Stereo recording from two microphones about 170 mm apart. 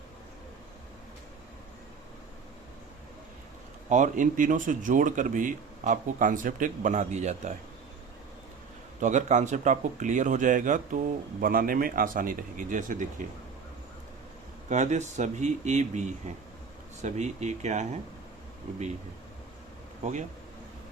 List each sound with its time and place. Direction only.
3.8 s speech: 45° right (ahead or behind)
9.0 s speech: 45° right (ahead or behind)
14.7 s speech: 45° right (ahead or behind)